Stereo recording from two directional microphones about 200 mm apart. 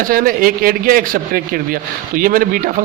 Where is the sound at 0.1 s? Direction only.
45° right (ahead or behind).